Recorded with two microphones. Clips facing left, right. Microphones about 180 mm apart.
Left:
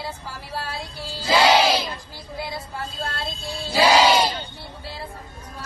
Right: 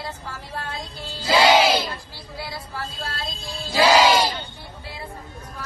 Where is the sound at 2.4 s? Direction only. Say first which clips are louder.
Left 2 dB; 20° left (ahead or behind).